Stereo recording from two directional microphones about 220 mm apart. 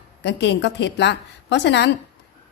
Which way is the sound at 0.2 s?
50° left (ahead or behind).